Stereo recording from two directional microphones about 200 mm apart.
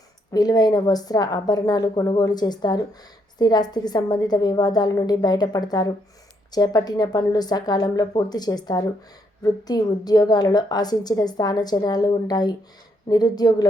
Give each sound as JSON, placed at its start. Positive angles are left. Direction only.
{"t": 0.3, "sound": "a woman's voice", "side_deg": 20}